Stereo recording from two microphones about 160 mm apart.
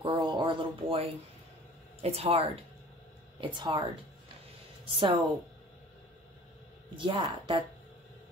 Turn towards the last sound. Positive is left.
turn(degrees=-30)  # may be behind; listen again after turning